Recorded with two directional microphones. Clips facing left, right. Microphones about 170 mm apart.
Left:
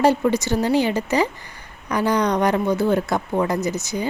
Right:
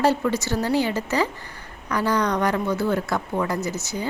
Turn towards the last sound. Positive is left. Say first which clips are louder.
# left 4 dB
turn(degrees=15)  # may be behind; listen again after turning